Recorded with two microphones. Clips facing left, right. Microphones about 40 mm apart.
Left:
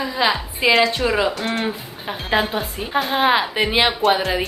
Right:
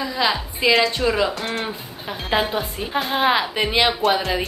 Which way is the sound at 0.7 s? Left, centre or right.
Centre.